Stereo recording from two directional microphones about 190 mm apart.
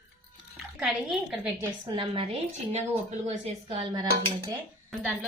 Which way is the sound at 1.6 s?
25° right (ahead or behind).